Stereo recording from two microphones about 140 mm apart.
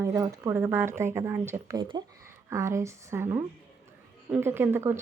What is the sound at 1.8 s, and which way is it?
Speech, 35° right (ahead or behind).